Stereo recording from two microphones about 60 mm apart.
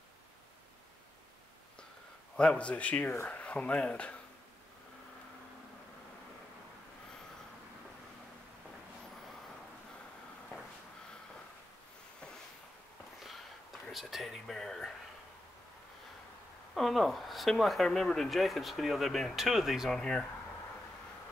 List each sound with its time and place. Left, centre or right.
2.3 s speech: centre
13.9 s a sound: centre
16.7 s speech: centre
20.0 s speech: centre